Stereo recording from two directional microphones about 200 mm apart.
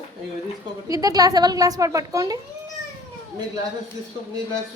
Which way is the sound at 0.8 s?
15° right (ahead or behind).